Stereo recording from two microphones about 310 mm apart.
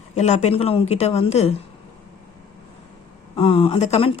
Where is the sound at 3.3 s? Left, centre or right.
Centre.